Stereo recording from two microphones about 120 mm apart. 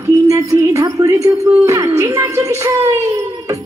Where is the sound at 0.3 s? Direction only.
25° right (ahead or behind).